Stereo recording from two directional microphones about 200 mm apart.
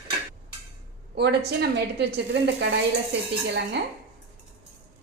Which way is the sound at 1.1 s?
55° right (ahead or behind).